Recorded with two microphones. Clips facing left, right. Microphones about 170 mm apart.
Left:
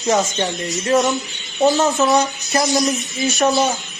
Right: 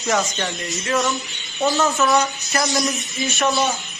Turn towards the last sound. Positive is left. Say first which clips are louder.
# left 4 dB
turn(degrees=40)  # may be behind; listen again after turning